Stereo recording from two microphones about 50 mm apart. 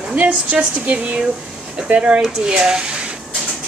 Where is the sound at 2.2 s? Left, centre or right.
Centre.